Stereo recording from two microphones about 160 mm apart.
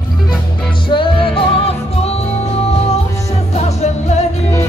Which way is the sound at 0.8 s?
30° left (ahead or behind).